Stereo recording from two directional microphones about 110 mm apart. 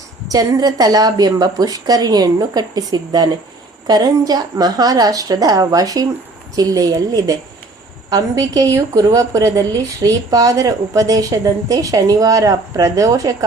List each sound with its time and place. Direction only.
0.3 s a woman's voice: 35° right (ahead or behind)